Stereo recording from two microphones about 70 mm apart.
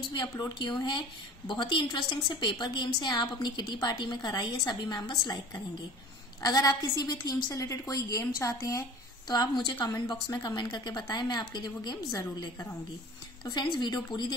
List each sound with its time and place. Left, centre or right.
0.1 s a woman's voice: left
3.8 s a woman's voice: left
4.6 s a woman's voice: left
6.4 s a woman's voice: left
9.3 s a woman's voice: left
13.5 s a woman's voice: left